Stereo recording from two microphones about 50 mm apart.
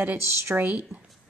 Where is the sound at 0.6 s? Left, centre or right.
Right.